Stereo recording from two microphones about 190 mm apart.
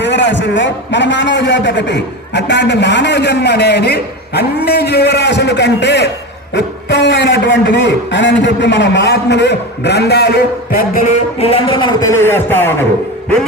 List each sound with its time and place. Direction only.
0.0 s a man's voice: 70° left (ahead or behind); by 12.7 s 10° left (ahead or behind)